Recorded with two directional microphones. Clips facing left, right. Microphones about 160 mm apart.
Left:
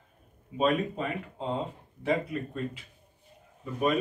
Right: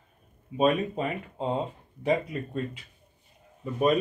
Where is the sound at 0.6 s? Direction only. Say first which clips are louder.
Right 2 dB; 15° right (ahead or behind).